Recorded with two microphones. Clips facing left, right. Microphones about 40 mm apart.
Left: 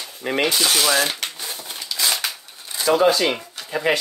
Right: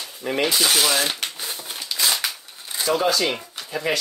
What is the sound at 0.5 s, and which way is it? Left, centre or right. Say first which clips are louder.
Speech: even; centre.